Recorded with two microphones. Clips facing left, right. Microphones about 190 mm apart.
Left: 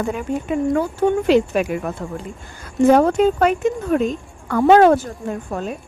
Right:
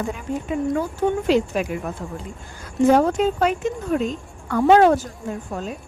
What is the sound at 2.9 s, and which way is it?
A woman's voice, 60° left (ahead or behind).